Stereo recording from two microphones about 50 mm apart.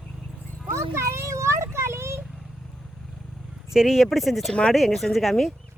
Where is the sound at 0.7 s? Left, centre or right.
Right.